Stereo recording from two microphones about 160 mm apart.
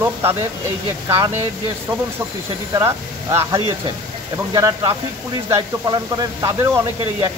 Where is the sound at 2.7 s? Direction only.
15° right (ahead or behind).